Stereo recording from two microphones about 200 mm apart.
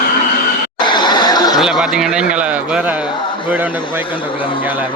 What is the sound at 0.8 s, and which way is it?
Chatter, 20° left (ahead or behind).